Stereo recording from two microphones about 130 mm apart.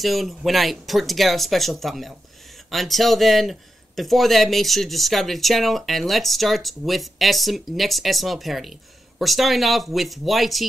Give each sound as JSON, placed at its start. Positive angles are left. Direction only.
{"t": 0.0, "sound": "speech", "side_deg": 0}